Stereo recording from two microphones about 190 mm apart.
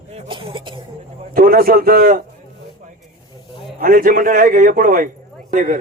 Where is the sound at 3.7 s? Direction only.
45° right (ahead or behind).